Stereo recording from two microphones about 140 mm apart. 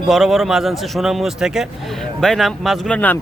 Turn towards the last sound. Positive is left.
turn(degrees=10)  # may be behind; listen again after turning